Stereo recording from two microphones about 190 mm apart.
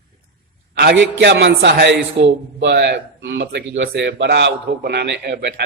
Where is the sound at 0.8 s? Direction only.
60° right (ahead or behind).